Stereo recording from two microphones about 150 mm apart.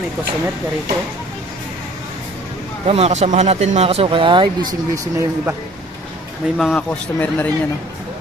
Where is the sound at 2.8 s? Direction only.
45° right (ahead or behind); by 5.5 s 20° right (ahead or behind).